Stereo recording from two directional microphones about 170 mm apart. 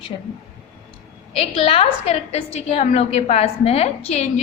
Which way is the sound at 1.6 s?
35° left (ahead or behind).